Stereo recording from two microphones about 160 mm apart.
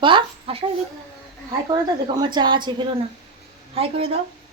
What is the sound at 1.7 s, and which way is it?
A woman's voice, 25° right (ahead or behind).